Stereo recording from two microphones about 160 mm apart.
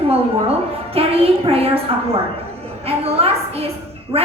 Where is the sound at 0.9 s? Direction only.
35° right (ahead or behind).